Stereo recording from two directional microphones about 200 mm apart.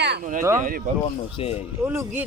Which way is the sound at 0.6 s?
45° right (ahead or behind).